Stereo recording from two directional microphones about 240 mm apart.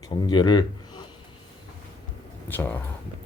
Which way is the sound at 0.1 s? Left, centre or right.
Centre.